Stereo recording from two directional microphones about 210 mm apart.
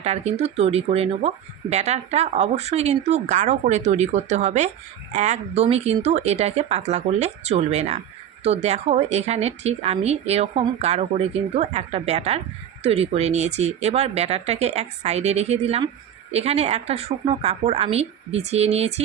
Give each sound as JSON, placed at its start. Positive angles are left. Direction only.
{"t": 0.0, "sound": "a woman's voice", "side_deg": -30}